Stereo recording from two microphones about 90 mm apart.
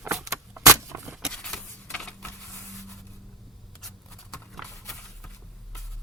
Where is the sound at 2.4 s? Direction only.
10° left (ahead or behind).